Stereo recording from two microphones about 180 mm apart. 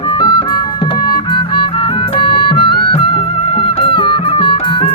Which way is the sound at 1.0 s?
25° left (ahead or behind).